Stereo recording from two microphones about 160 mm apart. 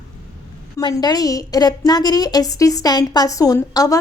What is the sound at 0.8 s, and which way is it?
A woman's voice, 25° left (ahead or behind).